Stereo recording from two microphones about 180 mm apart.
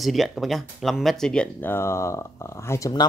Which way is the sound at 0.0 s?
Centre (ahead or behind).